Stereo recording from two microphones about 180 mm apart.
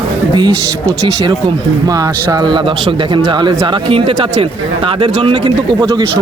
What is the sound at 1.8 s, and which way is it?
Speech, 20° right (ahead or behind).